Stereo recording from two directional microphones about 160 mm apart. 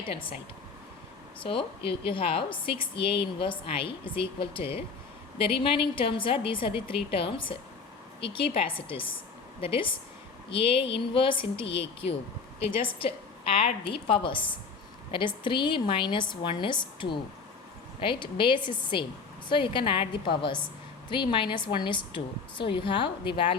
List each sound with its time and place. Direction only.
0.0 s a woman's voice: 35° left (ahead or behind)
1.4 s a woman's voice: 35° left (ahead or behind)
12.8 s a woman's voice: 35° left (ahead or behind)